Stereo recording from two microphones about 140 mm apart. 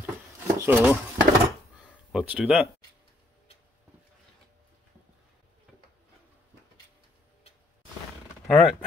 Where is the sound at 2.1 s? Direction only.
5° right (ahead or behind).